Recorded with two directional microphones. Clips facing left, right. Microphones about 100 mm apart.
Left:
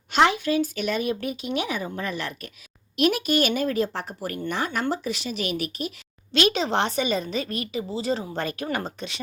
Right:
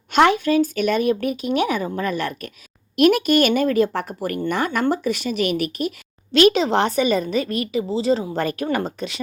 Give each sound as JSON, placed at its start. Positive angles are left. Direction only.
{"t": 0.1, "sound": "speech", "side_deg": -50}
{"t": 6.5, "sound": "a woman's voice", "side_deg": -40}
{"t": 7.3, "sound": "a woman's voice", "side_deg": 30}
{"t": 7.8, "sound": "a woman's voice", "side_deg": -30}